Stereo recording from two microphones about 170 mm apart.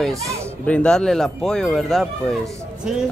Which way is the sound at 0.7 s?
5° left (ahead or behind).